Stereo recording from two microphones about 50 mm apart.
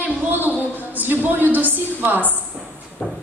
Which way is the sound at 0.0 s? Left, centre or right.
Right.